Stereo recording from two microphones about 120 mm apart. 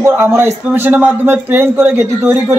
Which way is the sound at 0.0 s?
20° right (ahead or behind).